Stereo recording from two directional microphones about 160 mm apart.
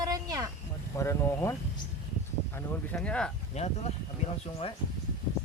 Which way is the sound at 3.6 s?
45° left (ahead or behind).